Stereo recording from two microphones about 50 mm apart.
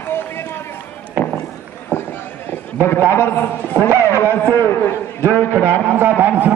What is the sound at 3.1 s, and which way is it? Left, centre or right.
A man's voice, left.